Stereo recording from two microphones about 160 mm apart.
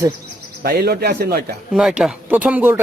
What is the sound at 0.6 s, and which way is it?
Speech, 75° right (ahead or behind).